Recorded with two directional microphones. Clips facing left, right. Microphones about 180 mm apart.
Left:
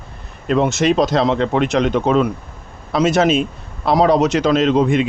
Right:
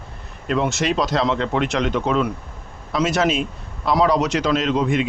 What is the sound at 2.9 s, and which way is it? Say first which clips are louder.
Speech: left 5 dB; 25° left (ahead or behind).